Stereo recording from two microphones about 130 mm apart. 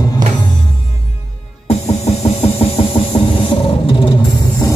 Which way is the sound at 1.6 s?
55° left (ahead or behind).